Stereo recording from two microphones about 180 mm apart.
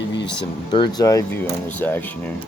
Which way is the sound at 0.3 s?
25° left (ahead or behind).